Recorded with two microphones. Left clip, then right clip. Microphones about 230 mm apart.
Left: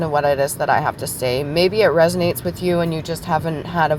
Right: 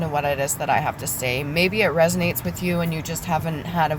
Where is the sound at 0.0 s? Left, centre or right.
Left.